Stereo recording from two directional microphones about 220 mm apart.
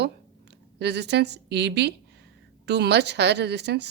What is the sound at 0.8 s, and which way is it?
A woman's voice, 50° right (ahead or behind).